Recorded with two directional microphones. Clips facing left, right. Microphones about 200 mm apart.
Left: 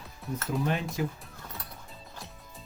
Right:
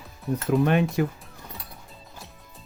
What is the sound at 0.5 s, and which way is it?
Speech, 65° right (ahead or behind).